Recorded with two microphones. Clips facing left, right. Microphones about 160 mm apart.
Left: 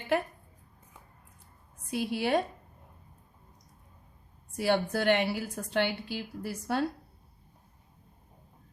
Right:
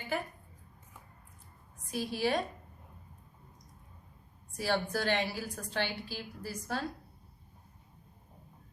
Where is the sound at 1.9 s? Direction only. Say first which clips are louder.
Left 3 dB; 65° left (ahead or behind).